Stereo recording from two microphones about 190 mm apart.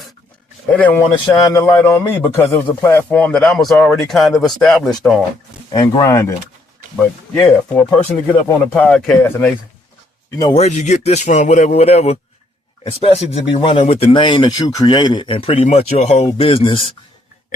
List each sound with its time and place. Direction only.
0.7 s a man's voice: 10° left (ahead or behind)
5.7 s a man's voice: 15° left (ahead or behind)
7.4 s a man's voice: 10° left (ahead or behind)
10.5 s speech: 35° left (ahead or behind)